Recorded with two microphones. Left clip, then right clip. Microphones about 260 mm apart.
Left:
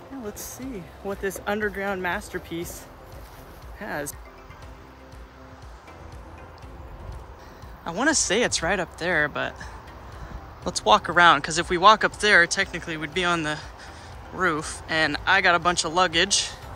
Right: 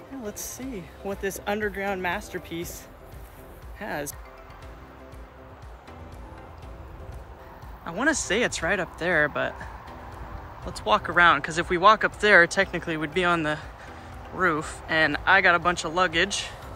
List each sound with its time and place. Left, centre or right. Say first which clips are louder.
0.4 s speech: even; centre
3.8 s speech: left 1 dB; centre
7.8 s speech: left 2 dB; centre
10.6 s speech: left 5 dB; centre